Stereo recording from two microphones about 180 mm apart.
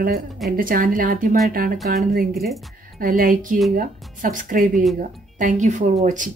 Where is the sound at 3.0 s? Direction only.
50° right (ahead or behind).